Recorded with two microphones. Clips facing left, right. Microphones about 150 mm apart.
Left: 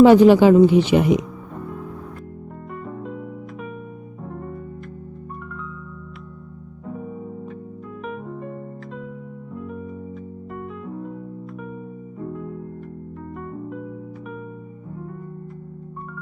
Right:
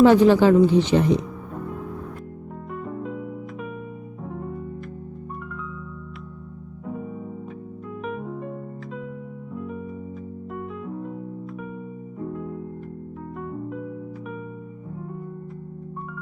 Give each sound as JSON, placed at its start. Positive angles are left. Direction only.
{"t": 0.0, "sound": "speech", "side_deg": 15}
{"t": 2.8, "sound": "music", "side_deg": 0}
{"t": 8.0, "sound": "music", "side_deg": 0}
{"t": 9.6, "sound": "music", "side_deg": 0}
{"t": 12.3, "sound": "music", "side_deg": 0}